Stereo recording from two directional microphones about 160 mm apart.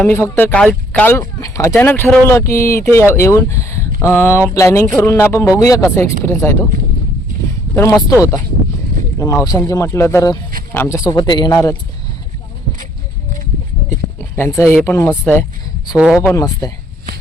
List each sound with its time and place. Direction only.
0.1 s speech: 15° left (ahead or behind)
7.8 s speech: 20° left (ahead or behind)
14.2 s speech: 15° left (ahead or behind)
16.0 s speech: centre (ahead or behind)
16.3 s speech: 20° left (ahead or behind)